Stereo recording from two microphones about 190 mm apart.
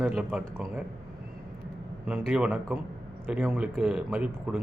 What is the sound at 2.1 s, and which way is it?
Speech, 5° right (ahead or behind).